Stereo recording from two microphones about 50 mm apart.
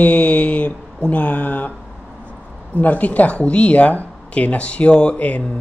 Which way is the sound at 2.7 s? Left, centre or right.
Left.